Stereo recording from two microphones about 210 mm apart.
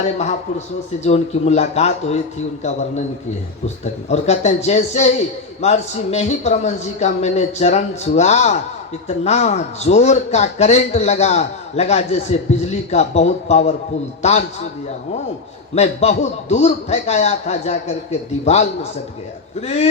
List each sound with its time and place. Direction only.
0.0 s speech: 30° left (ahead or behind)
4.1 s speech: 30° left (ahead or behind)
15.7 s speech: 30° left (ahead or behind)